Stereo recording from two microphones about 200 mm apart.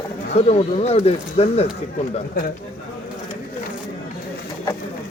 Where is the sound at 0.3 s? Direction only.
30° left (ahead or behind).